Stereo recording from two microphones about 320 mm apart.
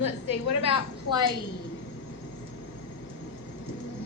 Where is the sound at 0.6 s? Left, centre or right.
Centre.